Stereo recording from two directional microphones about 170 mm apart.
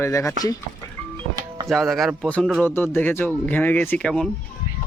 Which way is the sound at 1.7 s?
Centre (ahead or behind).